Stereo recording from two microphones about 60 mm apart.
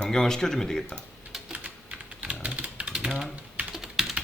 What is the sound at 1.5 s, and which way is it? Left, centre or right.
Typing, right.